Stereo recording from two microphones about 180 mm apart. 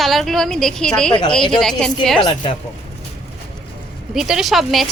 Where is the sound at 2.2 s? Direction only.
25° left (ahead or behind).